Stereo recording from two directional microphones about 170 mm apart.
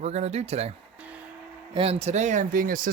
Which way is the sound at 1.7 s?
35° right (ahead or behind).